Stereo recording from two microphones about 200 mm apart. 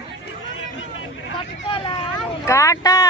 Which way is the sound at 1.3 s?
25° left (ahead or behind).